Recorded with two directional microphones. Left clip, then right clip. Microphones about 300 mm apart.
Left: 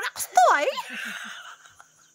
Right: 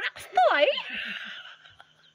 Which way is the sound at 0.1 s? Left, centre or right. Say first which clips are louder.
Left 4 dB; centre.